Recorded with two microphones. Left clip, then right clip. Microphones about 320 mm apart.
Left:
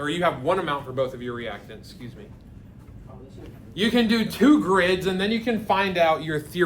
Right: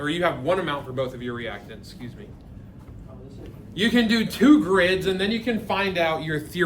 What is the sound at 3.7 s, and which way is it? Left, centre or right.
A man's voice, centre.